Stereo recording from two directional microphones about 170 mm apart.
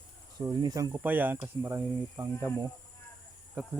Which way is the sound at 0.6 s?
20° right (ahead or behind).